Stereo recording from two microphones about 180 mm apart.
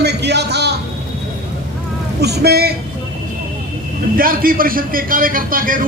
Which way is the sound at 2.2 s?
65° right (ahead or behind).